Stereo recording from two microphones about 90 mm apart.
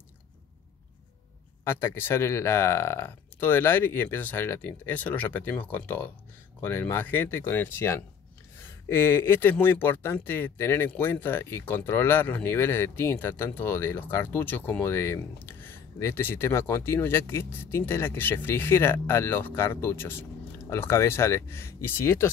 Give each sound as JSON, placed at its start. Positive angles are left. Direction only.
{"t": 1.6, "sound": "speech", "side_deg": 25}